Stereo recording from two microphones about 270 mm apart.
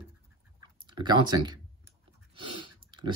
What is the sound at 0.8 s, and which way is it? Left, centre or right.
Clicking, centre.